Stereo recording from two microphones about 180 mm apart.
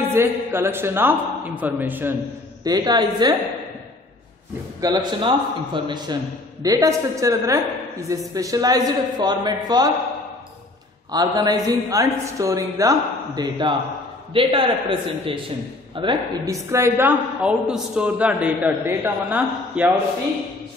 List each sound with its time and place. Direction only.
0.1 s a man's voice: 15° right (ahead or behind)
2.6 s a man's voice: 20° right (ahead or behind)
4.9 s a man's voice: 25° right (ahead or behind)
11.1 s a man's voice: 20° right (ahead or behind)